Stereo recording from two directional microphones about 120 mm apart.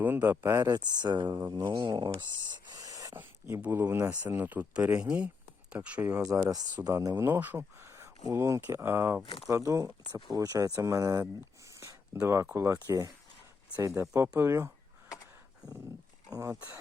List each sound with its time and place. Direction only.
0.0 s speech: 15° right (ahead or behind)
0.6 s speech: 35° right (ahead or behind)
2.5 s owl: 35° right (ahead or behind)
3.2 s speech: 20° right (ahead or behind)
6.1 s speech: 25° right (ahead or behind)
7.3 s speech: 15° right (ahead or behind)
11.7 s a sound: 25° right (ahead or behind)
12.2 s speech: 20° right (ahead or behind)
16.3 s speech: 30° right (ahead or behind)